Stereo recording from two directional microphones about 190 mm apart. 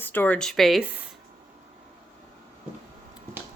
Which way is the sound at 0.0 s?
10° left (ahead or behind).